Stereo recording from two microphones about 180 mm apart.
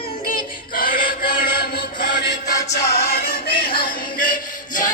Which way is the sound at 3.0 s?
60° left (ahead or behind).